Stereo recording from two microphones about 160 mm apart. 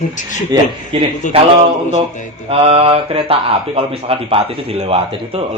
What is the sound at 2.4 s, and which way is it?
Speech, 40° right (ahead or behind).